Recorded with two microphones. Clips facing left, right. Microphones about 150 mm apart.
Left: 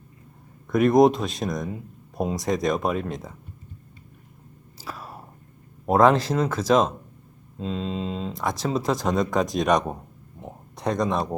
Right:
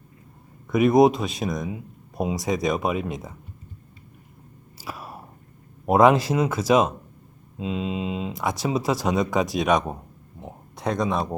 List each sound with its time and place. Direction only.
0.7 s speech: 5° right (ahead or behind)
4.8 s a sound: 10° right (ahead or behind)
5.8 s speech: 10° right (ahead or behind)